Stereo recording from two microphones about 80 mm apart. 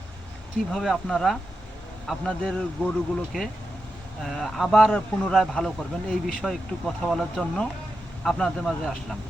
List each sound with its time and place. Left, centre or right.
0.7 s speech: centre
2.5 s speech: centre
4.2 s speech: centre
4.9 s speech: centre
5.3 s speech: centre